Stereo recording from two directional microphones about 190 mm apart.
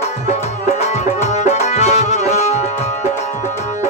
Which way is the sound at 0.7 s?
35° left (ahead or behind).